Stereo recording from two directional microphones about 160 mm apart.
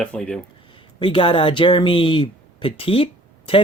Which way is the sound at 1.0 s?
30° left (ahead or behind).